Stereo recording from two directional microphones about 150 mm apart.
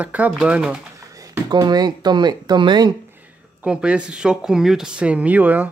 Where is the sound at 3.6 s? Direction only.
5° right (ahead or behind).